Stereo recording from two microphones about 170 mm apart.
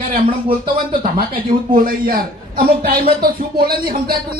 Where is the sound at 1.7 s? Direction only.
60° right (ahead or behind).